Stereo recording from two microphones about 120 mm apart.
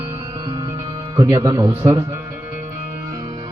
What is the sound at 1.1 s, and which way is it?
Speech, 30° right (ahead or behind).